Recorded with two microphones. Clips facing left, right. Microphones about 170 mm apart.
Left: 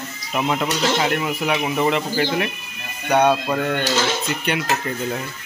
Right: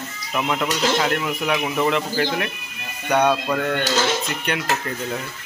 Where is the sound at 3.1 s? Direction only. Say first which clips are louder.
Left 2 dB; 25° left (ahead or behind).